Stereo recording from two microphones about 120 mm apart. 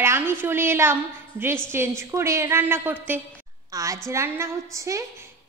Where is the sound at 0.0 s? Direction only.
20° right (ahead or behind).